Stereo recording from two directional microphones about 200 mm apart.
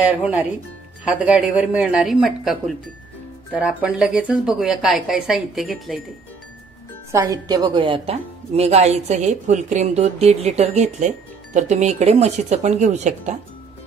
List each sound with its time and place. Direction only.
1.0 s a woman's voice: 5° right (ahead or behind)
7.1 s a woman's voice: 15° right (ahead or behind); by 13.3 s 35° right (ahead or behind)